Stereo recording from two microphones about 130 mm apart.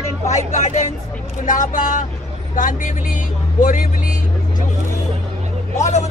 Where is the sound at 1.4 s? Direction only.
85° left.